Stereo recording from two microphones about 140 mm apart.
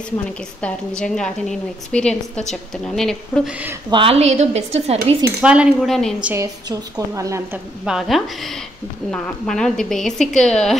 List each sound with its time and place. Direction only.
0.6 s a woman's voice: 5° left (ahead or behind)
3.9 s a woman's voice: 40° right (ahead or behind)
5.4 s a woman's voice: 5° right (ahead or behind)
6.2 s a woman's voice: 20° right (ahead or behind)
7.5 s a woman's voice: 5° right (ahead or behind)